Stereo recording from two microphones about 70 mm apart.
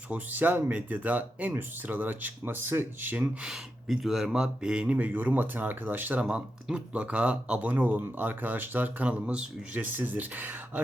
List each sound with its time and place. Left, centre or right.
0.1 s speech: right
3.4 s speech: centre; by 6.2 s right
6.2 s speech: centre